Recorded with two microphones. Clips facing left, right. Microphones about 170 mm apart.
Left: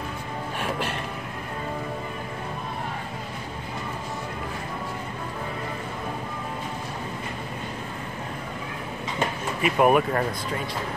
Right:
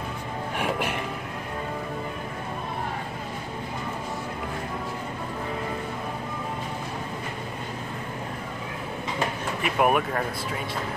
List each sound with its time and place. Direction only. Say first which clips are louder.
0.6 s music: right 2 dB; 15° right (ahead or behind)
9.6 s speech: left 3 dB; centre (ahead or behind)